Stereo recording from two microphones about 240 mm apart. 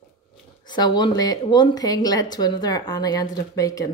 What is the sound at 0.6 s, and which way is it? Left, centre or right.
A woman's voice, centre.